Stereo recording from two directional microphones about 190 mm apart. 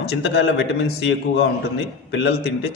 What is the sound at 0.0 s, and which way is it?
Speech, 60° left (ahead or behind).